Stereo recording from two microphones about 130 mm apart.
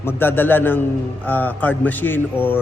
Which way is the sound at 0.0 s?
15° left (ahead or behind).